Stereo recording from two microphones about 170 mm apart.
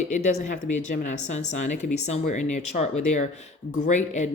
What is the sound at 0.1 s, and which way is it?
Speech, 40° left (ahead or behind).